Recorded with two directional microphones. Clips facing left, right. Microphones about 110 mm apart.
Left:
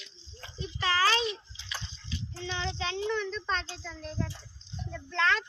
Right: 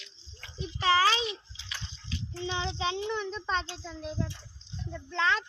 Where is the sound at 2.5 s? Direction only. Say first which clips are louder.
Right 2 dB; 25° right (ahead or behind).